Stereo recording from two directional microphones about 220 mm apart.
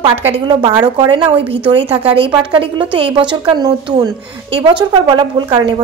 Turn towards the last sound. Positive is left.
turn(degrees=-20)  # may be behind; listen again after turning